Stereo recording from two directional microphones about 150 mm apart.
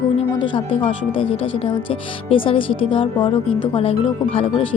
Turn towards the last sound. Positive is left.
turn(degrees=40)  # may be behind; listen again after turning